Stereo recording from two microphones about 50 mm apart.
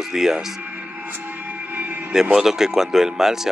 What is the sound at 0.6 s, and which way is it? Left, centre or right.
Music, right.